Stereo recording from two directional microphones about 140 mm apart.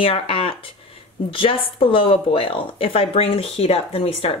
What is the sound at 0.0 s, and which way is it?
Speech, 40° left (ahead or behind).